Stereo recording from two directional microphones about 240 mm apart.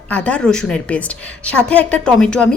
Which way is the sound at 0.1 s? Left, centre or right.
Centre.